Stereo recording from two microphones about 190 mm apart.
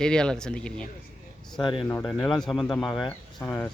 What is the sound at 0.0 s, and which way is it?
Speech, 5° left (ahead or behind).